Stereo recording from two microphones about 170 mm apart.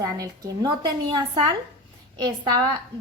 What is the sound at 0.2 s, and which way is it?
A woman's voice, 20° right (ahead or behind).